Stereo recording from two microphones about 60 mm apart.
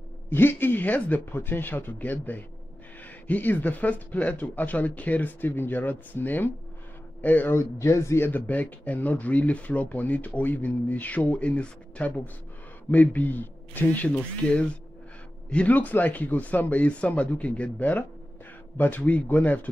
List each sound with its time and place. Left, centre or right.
0.3 s speech: left
7.5 s speech: left
8.3 s speech: left